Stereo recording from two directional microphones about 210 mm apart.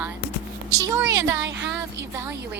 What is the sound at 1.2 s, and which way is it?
Speech, 60° right (ahead or behind).